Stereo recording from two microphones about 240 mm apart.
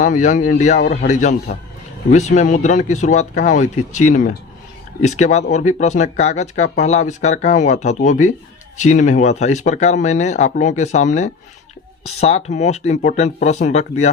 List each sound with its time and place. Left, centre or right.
0.0 s speech: left